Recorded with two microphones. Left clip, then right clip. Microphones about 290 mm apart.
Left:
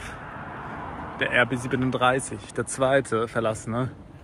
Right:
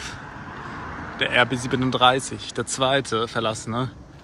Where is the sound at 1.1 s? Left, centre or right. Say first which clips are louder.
Right 2 dB; right.